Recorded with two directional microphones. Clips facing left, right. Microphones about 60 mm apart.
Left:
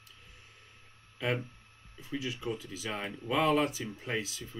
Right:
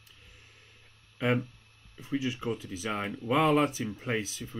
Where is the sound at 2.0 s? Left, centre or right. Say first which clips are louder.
Right 4 dB; right.